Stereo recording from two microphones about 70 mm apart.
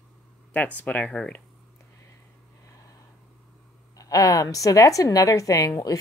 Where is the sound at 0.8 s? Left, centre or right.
Left.